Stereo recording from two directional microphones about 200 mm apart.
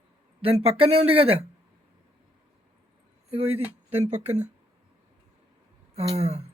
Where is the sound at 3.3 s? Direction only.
30° right (ahead or behind).